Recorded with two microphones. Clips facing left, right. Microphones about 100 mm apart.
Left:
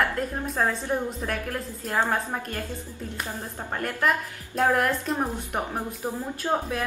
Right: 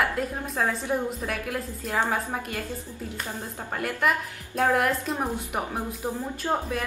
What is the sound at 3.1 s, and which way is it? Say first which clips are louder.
A woman's voice: left 2 dB; 10° left (ahead or behind).